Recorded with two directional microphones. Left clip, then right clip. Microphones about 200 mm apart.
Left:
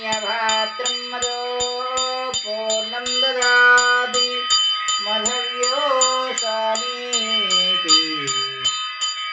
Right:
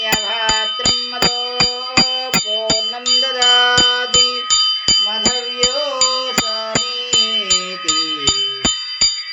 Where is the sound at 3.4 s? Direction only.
35° right (ahead or behind).